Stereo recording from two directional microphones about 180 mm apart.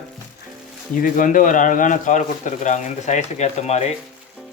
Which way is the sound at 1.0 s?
50° left (ahead or behind).